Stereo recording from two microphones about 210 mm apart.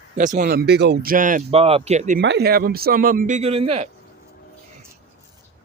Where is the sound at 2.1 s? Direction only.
50° right (ahead or behind); by 3.9 s 25° right (ahead or behind).